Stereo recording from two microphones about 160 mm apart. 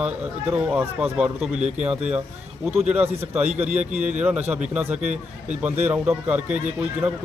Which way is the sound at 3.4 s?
40° right (ahead or behind).